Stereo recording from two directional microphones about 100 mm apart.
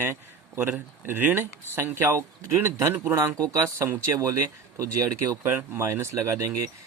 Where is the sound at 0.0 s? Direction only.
25° right (ahead or behind).